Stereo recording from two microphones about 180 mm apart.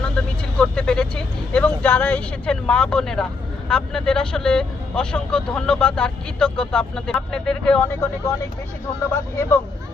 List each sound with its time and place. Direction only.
0.0 s speech: 5° left (ahead or behind)